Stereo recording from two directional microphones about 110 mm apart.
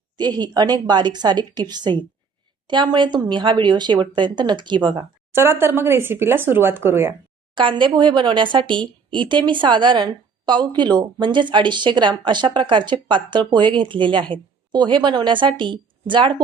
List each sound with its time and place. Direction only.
0.2 s a woman's voice: 40° right (ahead or behind)
5.3 s speech: 20° right (ahead or behind)
7.5 s speech: 50° right (ahead or behind)